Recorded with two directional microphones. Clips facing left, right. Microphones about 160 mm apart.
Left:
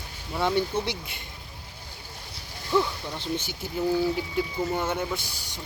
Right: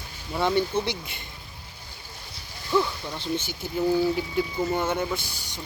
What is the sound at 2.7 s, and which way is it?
Speech, 15° left (ahead or behind).